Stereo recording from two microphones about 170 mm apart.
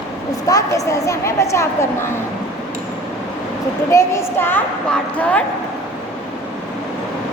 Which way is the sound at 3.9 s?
15° left (ahead or behind).